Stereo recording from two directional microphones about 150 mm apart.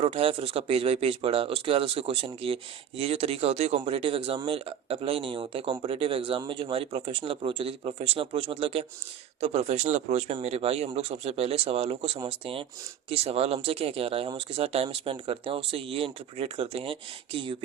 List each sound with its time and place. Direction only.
0.0 s speech: 40° right (ahead or behind)